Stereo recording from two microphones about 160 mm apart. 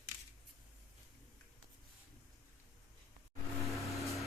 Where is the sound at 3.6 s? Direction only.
Centre (ahead or behind).